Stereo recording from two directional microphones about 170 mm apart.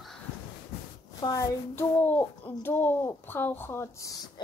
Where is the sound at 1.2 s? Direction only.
20° left (ahead or behind).